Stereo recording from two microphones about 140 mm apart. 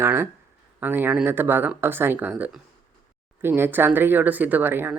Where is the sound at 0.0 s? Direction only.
15° right (ahead or behind).